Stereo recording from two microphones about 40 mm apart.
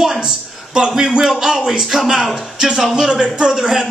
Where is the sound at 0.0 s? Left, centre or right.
Centre.